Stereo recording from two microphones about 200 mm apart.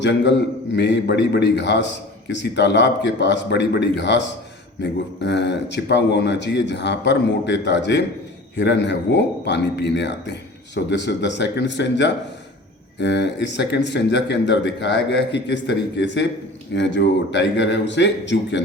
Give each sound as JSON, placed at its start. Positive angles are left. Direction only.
{"t": 0.0, "sound": "a man's voice", "side_deg": 60}